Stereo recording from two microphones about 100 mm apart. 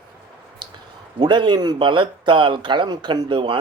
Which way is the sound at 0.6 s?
50° right (ahead or behind).